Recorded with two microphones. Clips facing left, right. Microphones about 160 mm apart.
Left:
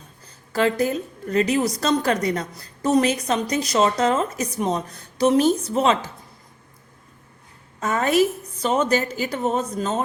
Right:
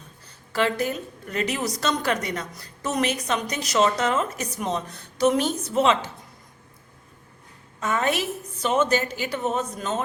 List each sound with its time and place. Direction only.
0.5 s a woman's voice: 40° left (ahead or behind)
7.8 s a woman's voice: 35° left (ahead or behind)